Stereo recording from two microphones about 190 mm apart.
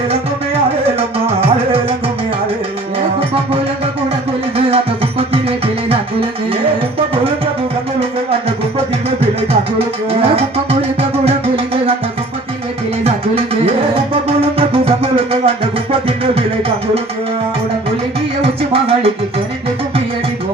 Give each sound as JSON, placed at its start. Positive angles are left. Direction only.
{"t": 0.9, "sound": "music", "side_deg": -30}
{"t": 4.5, "sound": "music", "side_deg": -30}
{"t": 9.0, "sound": "music", "side_deg": -30}
{"t": 13.1, "sound": "music", "side_deg": -30}
{"t": 18.4, "sound": "music", "side_deg": -30}